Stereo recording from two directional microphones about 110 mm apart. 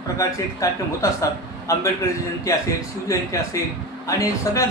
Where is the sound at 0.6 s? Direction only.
30° left (ahead or behind).